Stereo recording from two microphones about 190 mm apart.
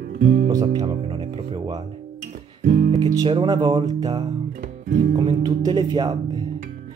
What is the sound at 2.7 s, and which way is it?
Music, 40° right (ahead or behind).